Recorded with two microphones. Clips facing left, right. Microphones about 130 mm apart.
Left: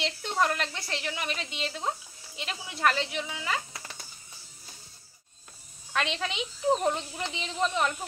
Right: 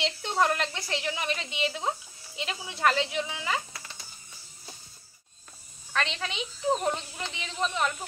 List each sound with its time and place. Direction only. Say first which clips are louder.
0.0 s a woman's voice: right 1 dB; centre (ahead or behind)
5.9 s speech: left 1 dB; 15° left (ahead or behind)